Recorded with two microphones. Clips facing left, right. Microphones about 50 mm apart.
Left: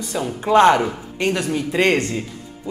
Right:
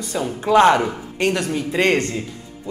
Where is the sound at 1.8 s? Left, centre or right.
Left.